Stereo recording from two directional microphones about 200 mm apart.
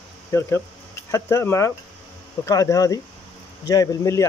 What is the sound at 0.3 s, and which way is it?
Speech, 15° left (ahead or behind).